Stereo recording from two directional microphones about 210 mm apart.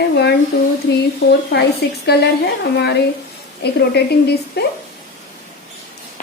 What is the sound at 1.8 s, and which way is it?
Speech, 50° left (ahead or behind).